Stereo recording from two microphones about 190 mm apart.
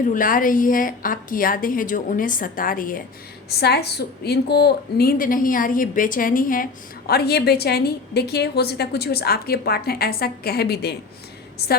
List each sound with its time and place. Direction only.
0.0 s a woman's voice: 45° left (ahead or behind)
3.5 s a woman's voice: 60° left (ahead or behind)
7.1 s a woman's voice: 55° left (ahead or behind)